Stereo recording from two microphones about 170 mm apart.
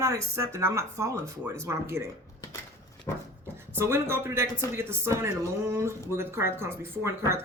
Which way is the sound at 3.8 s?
15° right (ahead or behind).